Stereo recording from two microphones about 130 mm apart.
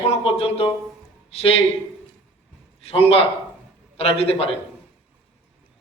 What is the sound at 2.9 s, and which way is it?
Speech, 50° left (ahead or behind).